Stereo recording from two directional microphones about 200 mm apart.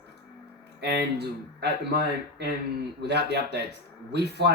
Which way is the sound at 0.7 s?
55° right (ahead or behind).